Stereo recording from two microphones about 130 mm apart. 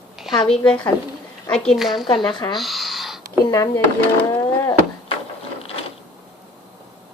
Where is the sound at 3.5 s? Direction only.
30° left (ahead or behind).